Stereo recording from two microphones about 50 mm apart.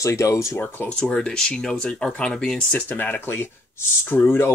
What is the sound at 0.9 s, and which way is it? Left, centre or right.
Speech, centre.